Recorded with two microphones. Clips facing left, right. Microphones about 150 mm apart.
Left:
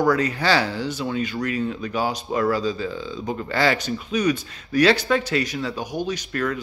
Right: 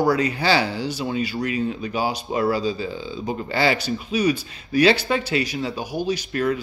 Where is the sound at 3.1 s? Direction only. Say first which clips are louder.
Right 2 dB; 10° right (ahead or behind).